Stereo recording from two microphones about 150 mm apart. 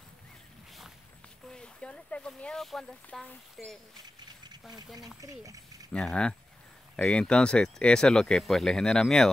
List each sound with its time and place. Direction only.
1.5 s speech: 5° left (ahead or behind)
4.5 s a sound: 25° right (ahead or behind)
4.9 s speech: 25° right (ahead or behind)
5.9 s speech: 5° left (ahead or behind)